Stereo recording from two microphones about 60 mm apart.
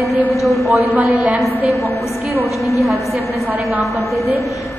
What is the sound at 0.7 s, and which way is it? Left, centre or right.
Speech, right.